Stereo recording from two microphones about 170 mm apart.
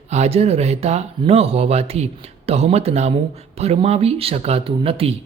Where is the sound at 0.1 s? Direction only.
40° right (ahead or behind).